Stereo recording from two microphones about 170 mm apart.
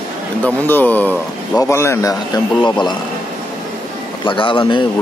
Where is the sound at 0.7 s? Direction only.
10° left (ahead or behind).